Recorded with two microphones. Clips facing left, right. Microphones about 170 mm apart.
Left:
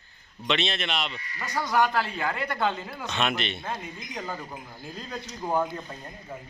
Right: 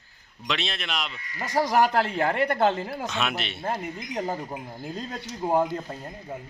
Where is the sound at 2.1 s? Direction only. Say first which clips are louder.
Right 6 dB; 60° right (ahead or behind).